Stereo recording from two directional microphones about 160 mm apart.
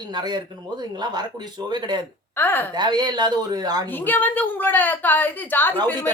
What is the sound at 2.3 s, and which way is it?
Speech, 15° left (ahead or behind).